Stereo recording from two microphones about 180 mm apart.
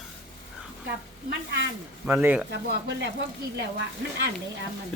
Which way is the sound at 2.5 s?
80° right.